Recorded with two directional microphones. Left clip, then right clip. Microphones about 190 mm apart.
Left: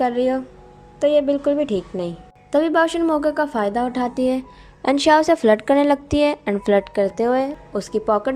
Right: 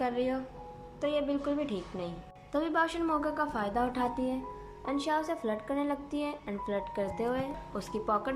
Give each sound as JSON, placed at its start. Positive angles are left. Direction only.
{"t": 0.0, "sound": "a woman's voice", "side_deg": 30}
{"t": 4.8, "sound": "a woman's voice", "side_deg": 50}